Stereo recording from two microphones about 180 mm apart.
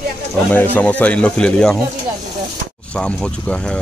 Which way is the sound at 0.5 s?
10° left (ahead or behind).